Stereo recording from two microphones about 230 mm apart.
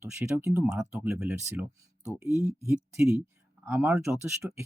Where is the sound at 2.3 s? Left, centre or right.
Right.